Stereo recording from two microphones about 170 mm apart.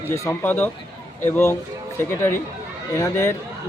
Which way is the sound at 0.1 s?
15° left (ahead or behind).